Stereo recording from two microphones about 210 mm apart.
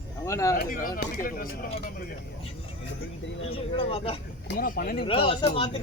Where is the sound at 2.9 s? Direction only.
65° left (ahead or behind).